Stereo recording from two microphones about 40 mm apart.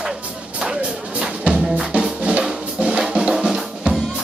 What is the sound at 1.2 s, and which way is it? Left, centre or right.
Music, right.